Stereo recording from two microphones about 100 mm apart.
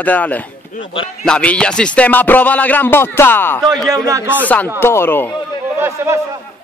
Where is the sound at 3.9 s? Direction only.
30° right (ahead or behind).